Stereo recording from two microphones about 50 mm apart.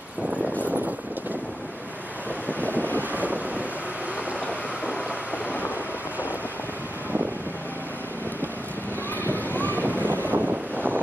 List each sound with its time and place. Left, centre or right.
0.7 s vehicle: right
3.0 s wind noise: right
9.5 s wind noise: left
9.8 s wind noise: right